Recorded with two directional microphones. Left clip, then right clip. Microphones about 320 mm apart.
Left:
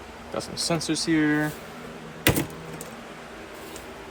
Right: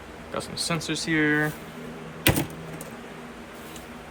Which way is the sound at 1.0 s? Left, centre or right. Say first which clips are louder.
Right 1 dB; centre.